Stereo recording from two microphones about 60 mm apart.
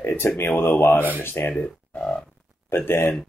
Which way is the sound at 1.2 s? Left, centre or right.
Left.